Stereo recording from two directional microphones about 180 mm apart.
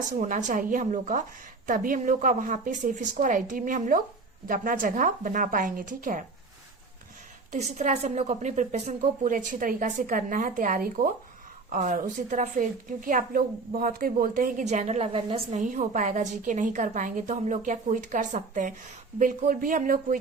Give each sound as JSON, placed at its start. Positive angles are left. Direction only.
{"t": 0.1, "sound": "a woman's voice", "side_deg": -45}
{"t": 7.5, "sound": "a woman's voice", "side_deg": -40}